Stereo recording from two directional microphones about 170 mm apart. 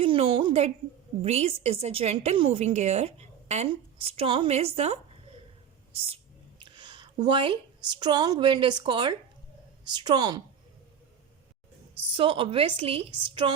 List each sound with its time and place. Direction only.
0.0 s a sound: 30° right (ahead or behind)
1.2 s a woman's voice: 35° right (ahead or behind)
6.6 s a woman's voice: 25° right (ahead or behind)
12.1 s a woman's voice: 30° right (ahead or behind)